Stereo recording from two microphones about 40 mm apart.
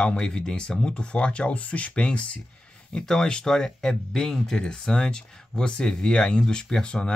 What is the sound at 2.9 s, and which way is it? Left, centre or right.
Speech, centre.